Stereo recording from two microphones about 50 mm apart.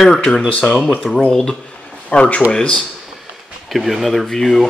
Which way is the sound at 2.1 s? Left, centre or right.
Left.